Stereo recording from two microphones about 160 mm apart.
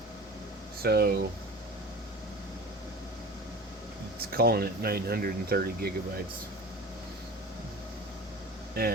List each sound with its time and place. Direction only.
0.8 s speech: 75° right (ahead or behind)
4.2 s speech: 70° right (ahead or behind)